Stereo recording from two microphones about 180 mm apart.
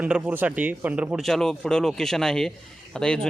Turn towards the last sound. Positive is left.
turn(degrees=5)  # may be behind; listen again after turning